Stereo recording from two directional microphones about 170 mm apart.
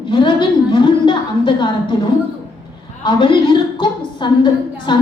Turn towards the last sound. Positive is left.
turn(degrees=25)  # may be behind; listen again after turning